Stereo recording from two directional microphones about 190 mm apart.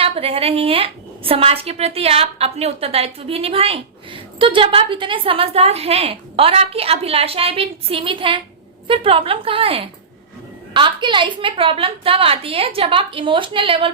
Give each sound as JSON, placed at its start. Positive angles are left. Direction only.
{"t": 0.0, "sound": "a woman's voice", "side_deg": -30}